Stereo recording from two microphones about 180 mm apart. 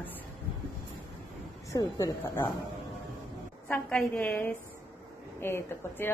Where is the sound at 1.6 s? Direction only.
20° left (ahead or behind).